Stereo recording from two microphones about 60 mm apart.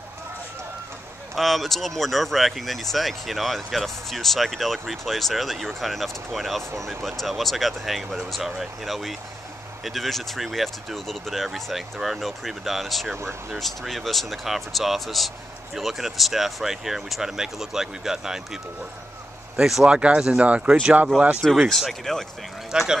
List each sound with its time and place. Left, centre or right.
1.3 s speech: centre
20.0 s speech: centre
21.5 s speech: centre
22.7 s speech: centre